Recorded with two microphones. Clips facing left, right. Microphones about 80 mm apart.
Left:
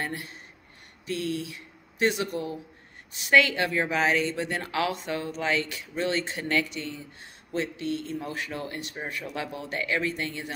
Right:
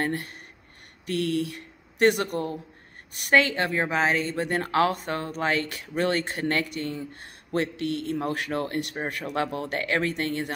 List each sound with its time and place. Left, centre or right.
0.0 s a woman's voice: right
1.0 s speech: right
3.3 s a woman's voice: right